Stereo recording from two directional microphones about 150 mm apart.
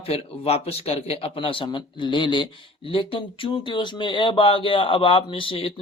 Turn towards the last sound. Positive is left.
turn(degrees=40)  # may be behind; listen again after turning